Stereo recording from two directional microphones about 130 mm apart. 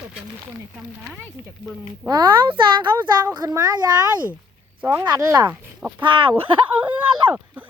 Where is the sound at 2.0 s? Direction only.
35° right (ahead or behind).